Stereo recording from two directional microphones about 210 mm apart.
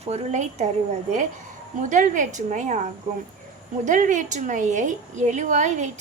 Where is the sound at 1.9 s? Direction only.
35° right (ahead or behind).